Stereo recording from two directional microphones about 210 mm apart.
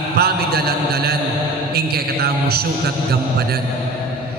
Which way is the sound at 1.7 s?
50° right (ahead or behind).